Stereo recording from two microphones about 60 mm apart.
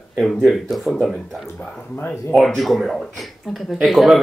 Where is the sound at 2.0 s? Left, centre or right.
Left.